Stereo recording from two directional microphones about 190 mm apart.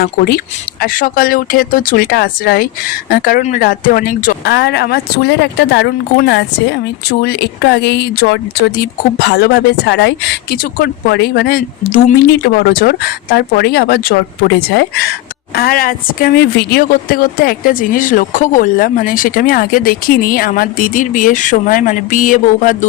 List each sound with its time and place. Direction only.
0.0 s a woman's voice: 50° left (ahead or behind)